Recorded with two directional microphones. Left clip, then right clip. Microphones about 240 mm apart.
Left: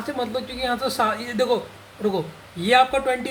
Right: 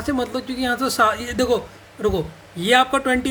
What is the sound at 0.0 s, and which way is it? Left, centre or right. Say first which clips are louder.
Speech: right 2 dB; right.